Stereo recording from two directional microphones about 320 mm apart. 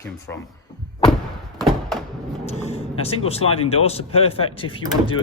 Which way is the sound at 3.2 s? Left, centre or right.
Centre.